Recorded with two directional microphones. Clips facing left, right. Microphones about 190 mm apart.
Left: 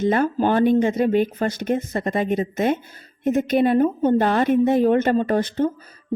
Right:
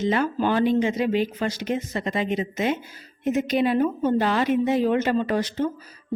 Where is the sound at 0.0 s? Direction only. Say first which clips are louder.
Left 3 dB; 50° left (ahead or behind).